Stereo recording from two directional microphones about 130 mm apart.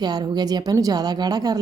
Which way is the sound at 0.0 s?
30° right (ahead or behind).